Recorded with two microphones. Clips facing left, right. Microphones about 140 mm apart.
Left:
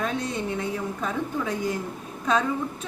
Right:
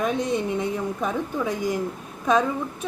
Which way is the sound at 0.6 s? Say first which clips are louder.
Right 3 dB; 15° right (ahead or behind).